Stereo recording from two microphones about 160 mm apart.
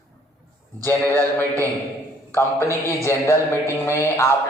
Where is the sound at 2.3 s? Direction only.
15° left (ahead or behind).